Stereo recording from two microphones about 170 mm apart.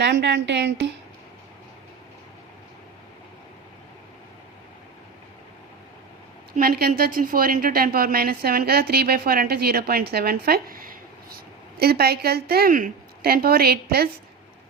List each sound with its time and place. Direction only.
0.0 s a woman's voice: 90° right
6.6 s a woman's voice: 60° right (ahead or behind)